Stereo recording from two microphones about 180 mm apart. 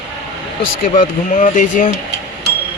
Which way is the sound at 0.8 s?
45° left (ahead or behind).